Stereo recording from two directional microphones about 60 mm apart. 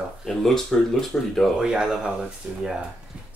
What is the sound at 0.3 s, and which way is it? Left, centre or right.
Speech, centre.